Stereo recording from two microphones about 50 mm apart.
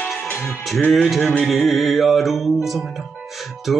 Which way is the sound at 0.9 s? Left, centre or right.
Centre.